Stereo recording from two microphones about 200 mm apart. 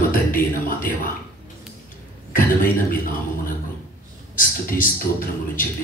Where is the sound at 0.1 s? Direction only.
45° left (ahead or behind).